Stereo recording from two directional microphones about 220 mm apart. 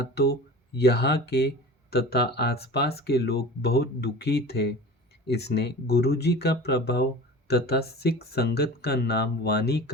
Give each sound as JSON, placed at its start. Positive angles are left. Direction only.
{"t": 0.0, "sound": "speech", "side_deg": 50}